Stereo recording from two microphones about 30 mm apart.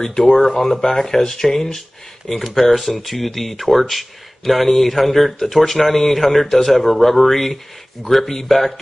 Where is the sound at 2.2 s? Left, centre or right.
Centre.